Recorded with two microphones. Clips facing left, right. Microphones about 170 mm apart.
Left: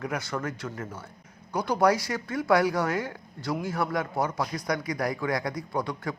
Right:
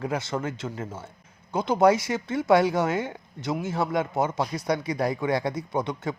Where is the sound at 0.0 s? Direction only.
25° right (ahead or behind).